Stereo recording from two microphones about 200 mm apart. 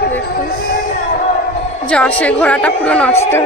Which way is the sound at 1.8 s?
5° left (ahead or behind).